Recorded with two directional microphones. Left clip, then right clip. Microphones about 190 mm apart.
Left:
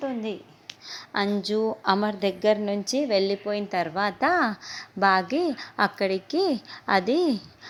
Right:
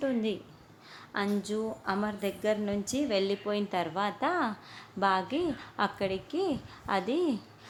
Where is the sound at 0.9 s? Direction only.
30° left (ahead or behind).